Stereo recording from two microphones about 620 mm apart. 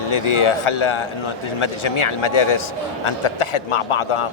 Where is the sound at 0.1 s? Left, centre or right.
Left.